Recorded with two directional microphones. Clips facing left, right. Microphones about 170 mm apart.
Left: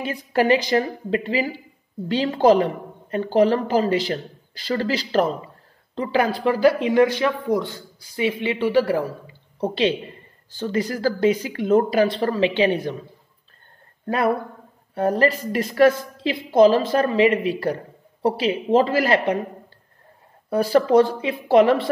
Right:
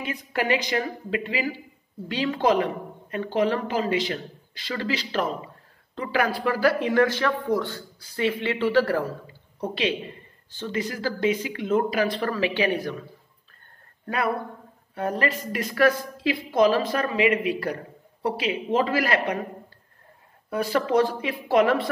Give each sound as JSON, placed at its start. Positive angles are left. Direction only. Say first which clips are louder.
{"t": 0.0, "sound": "a woman's voice", "louder": "left 7 dB", "side_deg": 30}
{"t": 5.9, "sound": "speech", "louder": "left 4 dB", "side_deg": 25}
{"t": 9.6, "sound": "a man's voice", "louder": "left 5 dB", "side_deg": 30}
{"t": 14.0, "sound": "a woman's voice", "louder": "left 5 dB", "side_deg": 35}
{"t": 20.4, "sound": "a woman's voice", "louder": "left 6 dB", "side_deg": 35}